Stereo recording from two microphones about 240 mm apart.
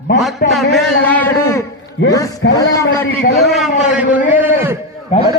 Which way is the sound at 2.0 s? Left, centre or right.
Left.